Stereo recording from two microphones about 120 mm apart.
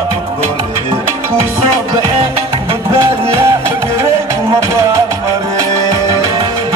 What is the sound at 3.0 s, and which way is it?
Music, 25° right (ahead or behind).